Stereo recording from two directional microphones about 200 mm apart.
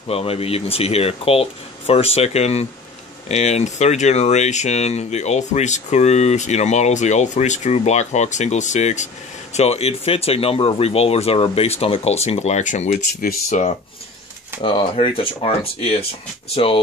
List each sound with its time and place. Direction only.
0.1 s speech: 30° left (ahead or behind)
14.6 s speech: 25° left (ahead or behind)